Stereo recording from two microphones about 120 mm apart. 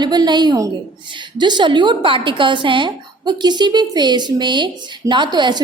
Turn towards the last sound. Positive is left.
turn(degrees=-35)  # may be behind; listen again after turning